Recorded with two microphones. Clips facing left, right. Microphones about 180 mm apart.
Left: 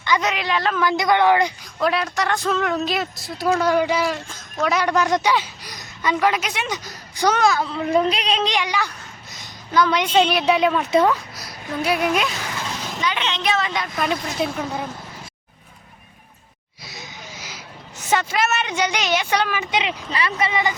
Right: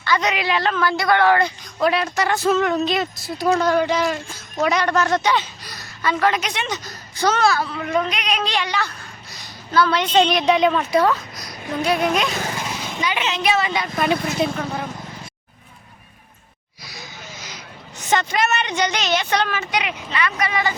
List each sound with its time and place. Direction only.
0.2 s speech: centre (ahead or behind)
0.8 s a woman's voice: 15° left (ahead or behind)
1.8 s a woman's voice: centre (ahead or behind)
12.5 s a sound: 10° right (ahead or behind)
13.0 s speech: 10° right (ahead or behind); by 14.8 s 10° left (ahead or behind)
16.8 s a sound: 25° left (ahead or behind)
17.3 s a woman's voice: 10° left (ahead or behind)
19.7 s speech: 25° left (ahead or behind)